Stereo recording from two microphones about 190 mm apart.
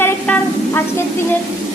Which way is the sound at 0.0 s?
10° left (ahead or behind).